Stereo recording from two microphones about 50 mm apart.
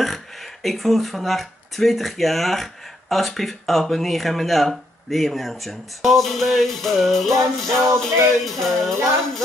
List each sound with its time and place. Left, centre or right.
0.0 s speech: centre